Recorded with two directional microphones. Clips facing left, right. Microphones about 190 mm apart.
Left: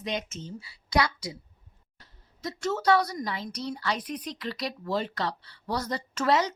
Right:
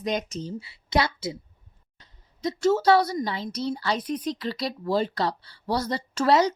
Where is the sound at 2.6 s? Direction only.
30° right (ahead or behind).